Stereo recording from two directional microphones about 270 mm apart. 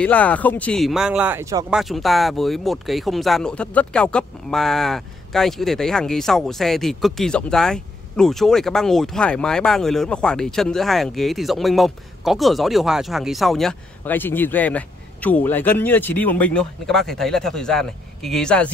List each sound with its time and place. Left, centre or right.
0.0 s speech: centre
1.8 s speech: centre